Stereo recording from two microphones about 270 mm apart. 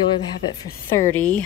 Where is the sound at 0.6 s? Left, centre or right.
Centre.